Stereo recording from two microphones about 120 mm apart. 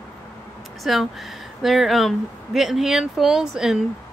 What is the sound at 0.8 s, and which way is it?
Speech, centre (ahead or behind).